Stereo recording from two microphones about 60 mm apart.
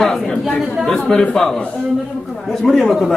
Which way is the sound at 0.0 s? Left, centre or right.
Centre.